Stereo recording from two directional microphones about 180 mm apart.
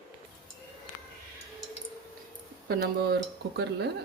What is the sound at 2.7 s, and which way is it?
Speech, 65° right (ahead or behind).